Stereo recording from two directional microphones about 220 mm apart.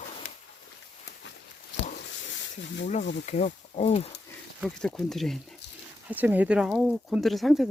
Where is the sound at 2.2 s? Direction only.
55° left (ahead or behind).